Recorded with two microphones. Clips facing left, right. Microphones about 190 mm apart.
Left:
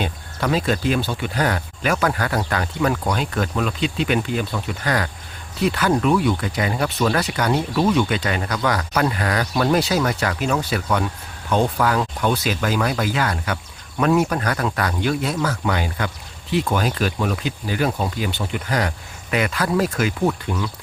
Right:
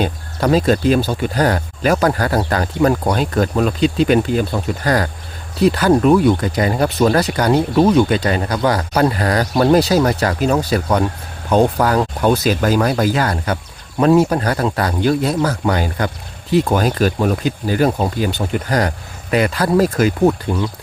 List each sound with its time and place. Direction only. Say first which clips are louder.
0.0 s speech: right 6 dB; 40° right (ahead or behind)